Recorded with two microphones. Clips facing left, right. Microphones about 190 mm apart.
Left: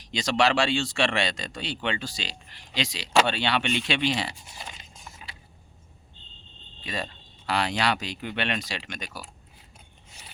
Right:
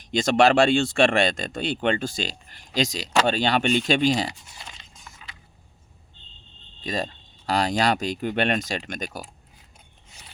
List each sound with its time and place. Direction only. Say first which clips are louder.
0.0 s speech: right 5 dB; 50° right (ahead or behind)
6.8 s speech: right 5 dB; 40° right (ahead or behind)